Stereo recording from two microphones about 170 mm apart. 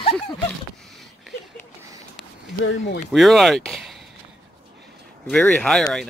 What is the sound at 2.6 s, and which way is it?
Speech, 90° left.